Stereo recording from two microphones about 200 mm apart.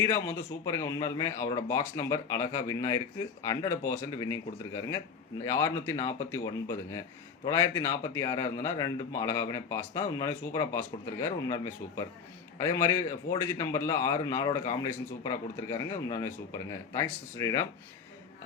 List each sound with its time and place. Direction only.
0.0 s speech: 15° left (ahead or behind)